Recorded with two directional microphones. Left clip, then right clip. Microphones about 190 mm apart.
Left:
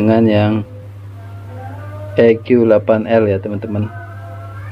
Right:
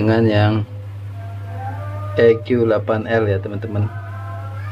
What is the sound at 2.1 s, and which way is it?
Speech, 20° left (ahead or behind).